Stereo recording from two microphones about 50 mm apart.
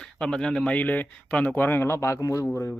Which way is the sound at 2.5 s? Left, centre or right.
Centre.